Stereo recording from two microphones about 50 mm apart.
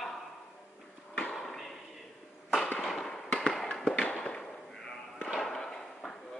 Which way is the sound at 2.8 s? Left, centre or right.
Centre.